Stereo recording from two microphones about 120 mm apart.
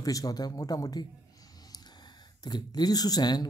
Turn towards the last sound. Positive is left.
turn(degrees=35)  # may be behind; listen again after turning